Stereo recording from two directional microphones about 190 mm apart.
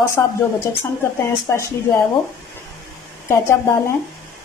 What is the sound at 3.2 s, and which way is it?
Speech, 15° left (ahead or behind).